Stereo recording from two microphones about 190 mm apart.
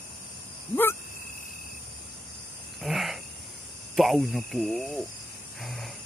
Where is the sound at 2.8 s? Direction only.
Centre (ahead or behind).